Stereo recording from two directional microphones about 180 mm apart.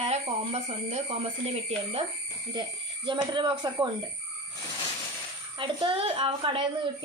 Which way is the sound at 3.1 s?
25° right (ahead or behind).